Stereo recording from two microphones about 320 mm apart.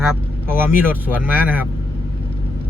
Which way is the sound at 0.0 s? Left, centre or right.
Centre.